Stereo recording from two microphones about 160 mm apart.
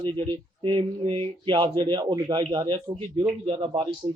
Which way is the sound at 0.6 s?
30° right (ahead or behind).